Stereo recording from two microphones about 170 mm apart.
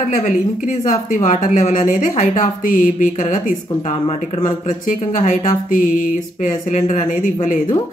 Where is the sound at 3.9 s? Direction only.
35° left (ahead or behind).